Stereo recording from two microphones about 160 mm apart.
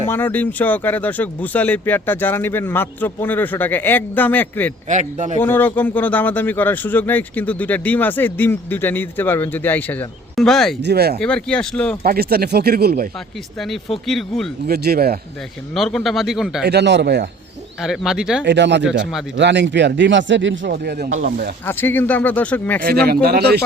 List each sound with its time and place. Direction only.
0.1 s a man's voice: 10° left (ahead or behind)
4.9 s a man's voice: 50° right (ahead or behind)
5.4 s a man's voice: 10° left (ahead or behind)
10.8 s speech: 85° right
11.2 s a man's voice: 5° left (ahead or behind)
12.0 s speech: 70° right (ahead or behind)
14.1 s a man's voice: centre (ahead or behind)
14.7 s speech: 70° right (ahead or behind)
15.7 s a man's voice: centre (ahead or behind)
16.6 s speech: 90° right
17.7 s a man's voice: centre (ahead or behind)
18.4 s speech: 90° right; by 21.5 s 70° right (ahead or behind)
21.7 s a man's voice: 10° left (ahead or behind)
22.8 s speech: 75° right (ahead or behind)